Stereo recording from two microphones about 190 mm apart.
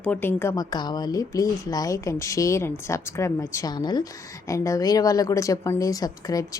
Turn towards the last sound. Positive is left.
turn(degrees=20)  # may be behind; listen again after turning